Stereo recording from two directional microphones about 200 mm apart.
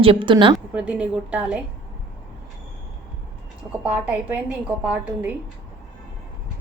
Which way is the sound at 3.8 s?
5° right (ahead or behind).